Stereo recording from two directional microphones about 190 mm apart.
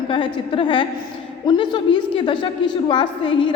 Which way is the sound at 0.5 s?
25° left (ahead or behind).